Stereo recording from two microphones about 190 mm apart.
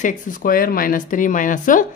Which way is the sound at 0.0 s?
45° left (ahead or behind).